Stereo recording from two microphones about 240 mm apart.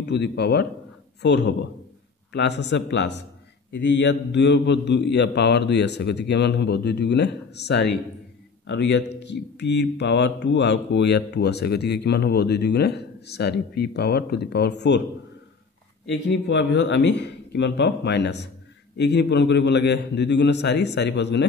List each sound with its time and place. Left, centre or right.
0.0 s speech: left
16.1 s speech: left